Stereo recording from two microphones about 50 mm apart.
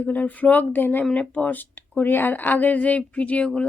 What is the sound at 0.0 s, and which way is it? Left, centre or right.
Speech, left.